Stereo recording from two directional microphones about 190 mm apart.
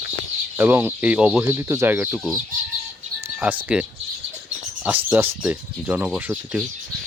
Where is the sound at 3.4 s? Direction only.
10° right (ahead or behind).